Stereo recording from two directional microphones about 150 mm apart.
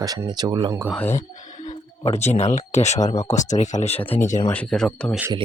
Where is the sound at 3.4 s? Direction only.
55° left (ahead or behind).